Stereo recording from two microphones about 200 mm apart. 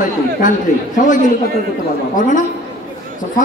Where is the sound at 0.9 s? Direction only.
40° left (ahead or behind).